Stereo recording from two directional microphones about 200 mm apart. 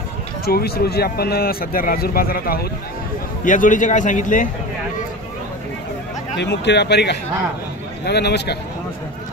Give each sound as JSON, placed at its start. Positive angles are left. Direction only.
{"t": 0.5, "sound": "a man's voice", "side_deg": 50}
{"t": 6.3, "sound": "a man's voice", "side_deg": 60}